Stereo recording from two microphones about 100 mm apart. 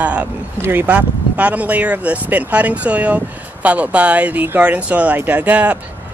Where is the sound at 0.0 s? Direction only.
15° right (ahead or behind).